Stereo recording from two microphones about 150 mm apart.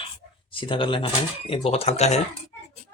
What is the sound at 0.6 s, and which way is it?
Speech, 35° left (ahead or behind).